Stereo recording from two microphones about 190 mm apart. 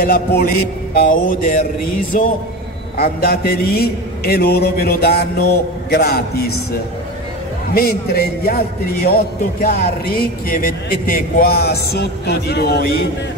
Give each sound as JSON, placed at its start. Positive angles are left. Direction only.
{"t": 0.0, "sound": "a man's voice", "side_deg": 50}
{"t": 3.0, "sound": "a man's voice", "side_deg": 50}
{"t": 7.7, "sound": "a man's voice", "side_deg": 55}